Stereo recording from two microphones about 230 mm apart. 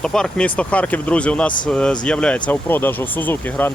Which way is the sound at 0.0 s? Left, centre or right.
Centre.